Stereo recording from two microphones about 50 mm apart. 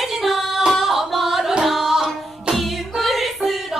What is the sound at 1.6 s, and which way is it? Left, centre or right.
Music, centre.